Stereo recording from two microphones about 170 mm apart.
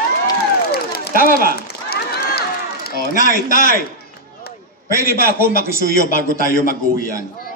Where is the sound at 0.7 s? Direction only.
70° left (ahead or behind).